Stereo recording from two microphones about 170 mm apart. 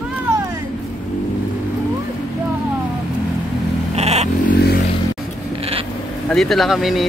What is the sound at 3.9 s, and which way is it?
Vehicle, 40° right (ahead or behind).